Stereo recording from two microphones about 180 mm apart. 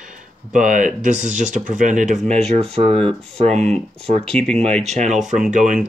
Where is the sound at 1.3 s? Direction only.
45° right (ahead or behind).